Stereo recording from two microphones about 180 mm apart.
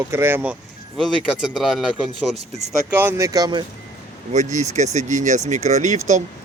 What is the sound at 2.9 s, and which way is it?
Speech, 10° right (ahead or behind).